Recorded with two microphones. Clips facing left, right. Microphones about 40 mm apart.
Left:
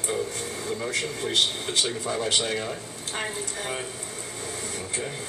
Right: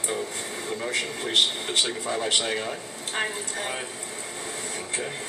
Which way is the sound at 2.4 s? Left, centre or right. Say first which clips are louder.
Even; centre.